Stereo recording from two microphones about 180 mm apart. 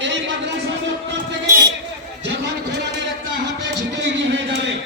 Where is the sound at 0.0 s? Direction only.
80° right.